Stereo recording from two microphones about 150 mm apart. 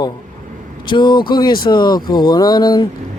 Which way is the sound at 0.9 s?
30° left (ahead or behind).